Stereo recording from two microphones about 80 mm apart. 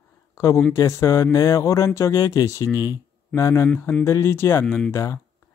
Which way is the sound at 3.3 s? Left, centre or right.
Left.